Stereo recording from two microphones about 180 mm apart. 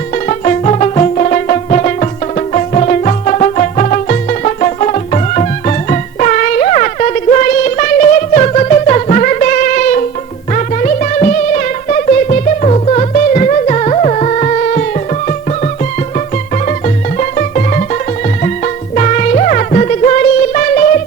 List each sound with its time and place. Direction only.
0.3 s music: 40° left (ahead or behind)